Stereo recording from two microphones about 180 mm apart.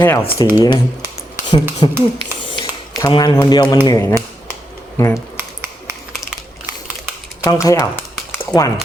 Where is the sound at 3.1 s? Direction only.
25° left (ahead or behind).